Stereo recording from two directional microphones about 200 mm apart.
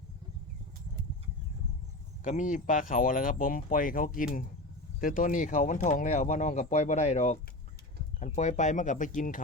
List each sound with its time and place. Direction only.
2.2 s speech: 40° left (ahead or behind)